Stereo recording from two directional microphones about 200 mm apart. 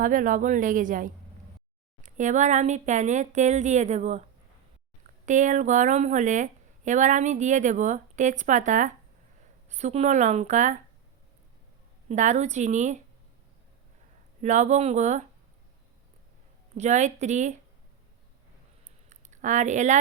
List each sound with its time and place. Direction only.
0.0 s a woman's voice: 40° right (ahead or behind)
5.2 s a woman's voice: 40° right (ahead or behind)
12.0 s a woman's voice: 35° right (ahead or behind)
14.4 s a woman's voice: 35° right (ahead or behind)
16.7 s a woman's voice: 35° right (ahead or behind)
19.1 s a woman's voice: 35° right (ahead or behind)